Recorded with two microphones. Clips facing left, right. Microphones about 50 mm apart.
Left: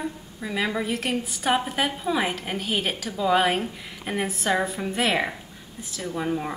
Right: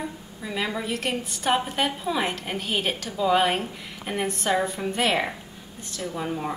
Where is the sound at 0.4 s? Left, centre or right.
Centre.